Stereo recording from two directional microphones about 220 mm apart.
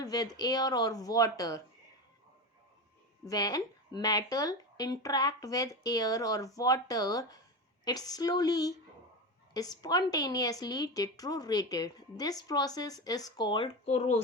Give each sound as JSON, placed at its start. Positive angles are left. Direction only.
{"t": 0.0, "sound": "a sound", "side_deg": 15}
{"t": 0.3, "sound": "speech", "side_deg": 15}
{"t": 3.2, "sound": "speech", "side_deg": 15}